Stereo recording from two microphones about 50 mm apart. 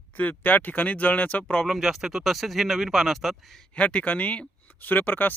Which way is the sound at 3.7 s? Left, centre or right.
Left.